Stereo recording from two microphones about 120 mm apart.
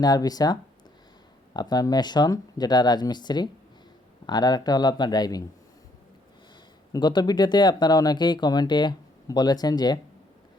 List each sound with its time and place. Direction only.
0.0 s speech: 30° left (ahead or behind)
6.9 s speech: 35° left (ahead or behind)